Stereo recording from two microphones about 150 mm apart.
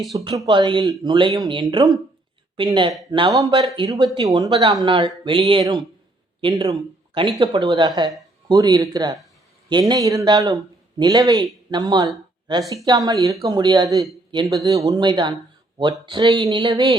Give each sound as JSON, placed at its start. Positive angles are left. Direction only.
{"t": 0.3, "sound": "speech", "side_deg": -30}